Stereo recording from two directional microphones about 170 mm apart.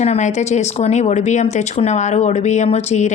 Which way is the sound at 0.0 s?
40° left (ahead or behind).